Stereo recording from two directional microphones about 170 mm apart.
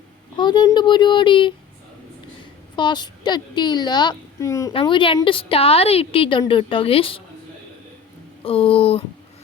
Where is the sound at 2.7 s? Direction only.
25° left (ahead or behind).